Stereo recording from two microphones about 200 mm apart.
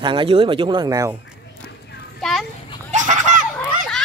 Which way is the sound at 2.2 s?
Centre (ahead or behind).